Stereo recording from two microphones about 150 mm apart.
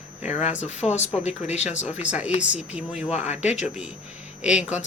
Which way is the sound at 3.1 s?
50° left (ahead or behind).